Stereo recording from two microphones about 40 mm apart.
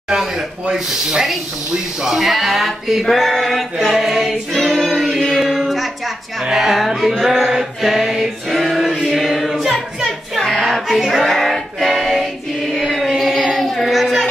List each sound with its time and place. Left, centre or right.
0.1 s speech: centre
3.9 s female singing: centre
4.5 s choir: centre
5.2 s music: centre
8.5 s choir: centre
9.5 s a capella: centre
10.7 s singing: centre
12.7 s chant: centre
13.6 s child singing: centre